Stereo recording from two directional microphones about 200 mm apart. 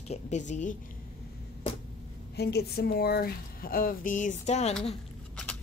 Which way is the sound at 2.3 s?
55° left (ahead or behind).